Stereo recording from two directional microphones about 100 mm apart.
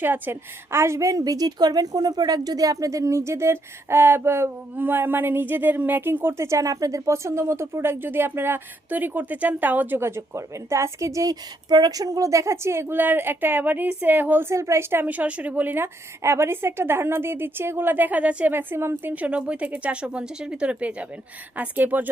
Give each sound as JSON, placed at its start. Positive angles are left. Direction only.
{"t": 0.0, "sound": "a woman's voice", "side_deg": -20}